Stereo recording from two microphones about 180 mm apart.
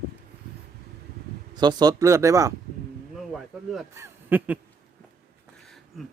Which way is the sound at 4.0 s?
10° right (ahead or behind).